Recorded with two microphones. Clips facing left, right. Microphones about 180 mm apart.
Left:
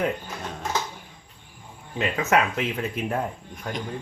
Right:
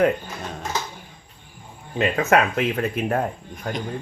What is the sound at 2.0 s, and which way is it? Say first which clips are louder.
Speech: right 4 dB; 50° right (ahead or behind).